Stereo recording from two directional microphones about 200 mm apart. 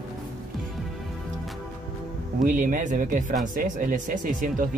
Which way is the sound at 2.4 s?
40° right (ahead or behind).